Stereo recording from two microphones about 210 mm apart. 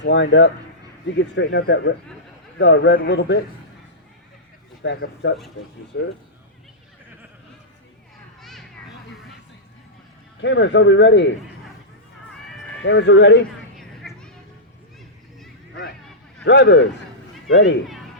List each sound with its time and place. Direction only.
0.0 s speech: 60° left (ahead or behind)
4.8 s speech: 55° left (ahead or behind)
8.4 s children playing: centre (ahead or behind)
10.4 s speech: 60° left (ahead or behind)
12.8 s speech: 60° left (ahead or behind)
14.0 s music: centre (ahead or behind)
16.4 s speech: 55° left (ahead or behind)